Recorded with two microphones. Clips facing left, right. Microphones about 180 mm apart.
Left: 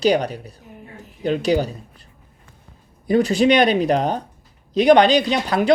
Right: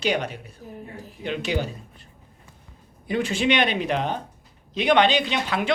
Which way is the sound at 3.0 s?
40° left (ahead or behind).